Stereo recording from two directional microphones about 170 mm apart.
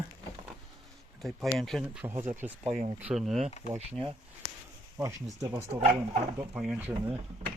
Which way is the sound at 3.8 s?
35° right (ahead or behind).